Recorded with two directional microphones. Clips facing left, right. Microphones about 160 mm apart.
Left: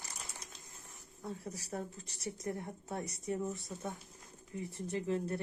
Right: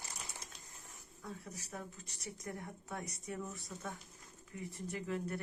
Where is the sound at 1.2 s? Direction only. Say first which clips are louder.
Left 5 dB; 35° left (ahead or behind).